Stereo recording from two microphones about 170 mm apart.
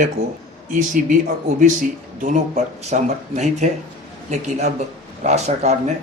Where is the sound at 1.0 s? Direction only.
55° right (ahead or behind).